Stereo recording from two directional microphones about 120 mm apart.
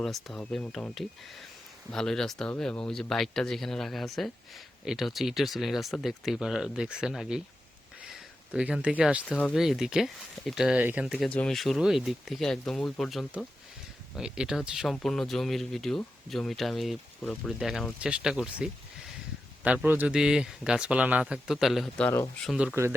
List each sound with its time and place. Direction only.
0.0 s speech: centre (ahead or behind)
8.5 s speech: 10° right (ahead or behind)
11.3 s speech: 5° left (ahead or behind)
22.7 s speech: 20° right (ahead or behind)